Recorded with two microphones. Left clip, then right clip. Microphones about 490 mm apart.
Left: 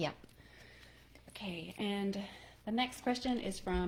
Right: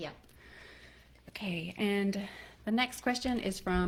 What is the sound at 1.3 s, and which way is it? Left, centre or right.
Speech, right.